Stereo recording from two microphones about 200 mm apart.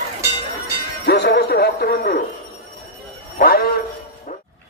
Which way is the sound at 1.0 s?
55° left (ahead or behind).